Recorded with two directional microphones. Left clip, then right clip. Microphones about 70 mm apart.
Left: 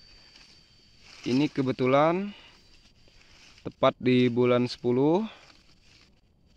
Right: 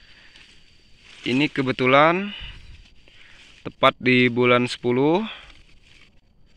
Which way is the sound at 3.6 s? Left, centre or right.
Left.